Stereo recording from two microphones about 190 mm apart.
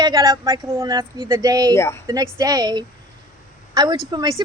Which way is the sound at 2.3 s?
20° right (ahead or behind).